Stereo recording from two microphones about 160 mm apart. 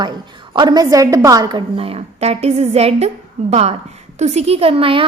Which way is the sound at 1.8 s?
35° right (ahead or behind).